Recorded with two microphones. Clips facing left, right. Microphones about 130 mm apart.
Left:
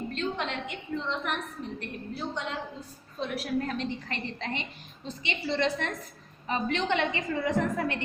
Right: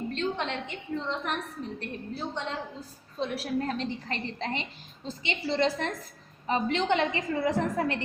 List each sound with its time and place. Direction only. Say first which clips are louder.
0.1 s a woman's voice: right 2 dB; 35° right (ahead or behind)